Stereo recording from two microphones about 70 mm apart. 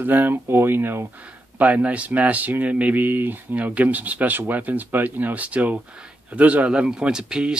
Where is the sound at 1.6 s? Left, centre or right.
Right.